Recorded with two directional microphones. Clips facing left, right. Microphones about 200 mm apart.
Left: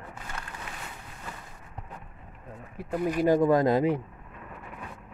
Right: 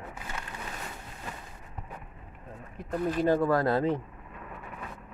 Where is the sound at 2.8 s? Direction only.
10° left (ahead or behind).